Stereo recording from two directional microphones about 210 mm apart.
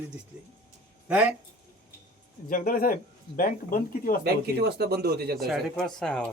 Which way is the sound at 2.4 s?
40° left (ahead or behind).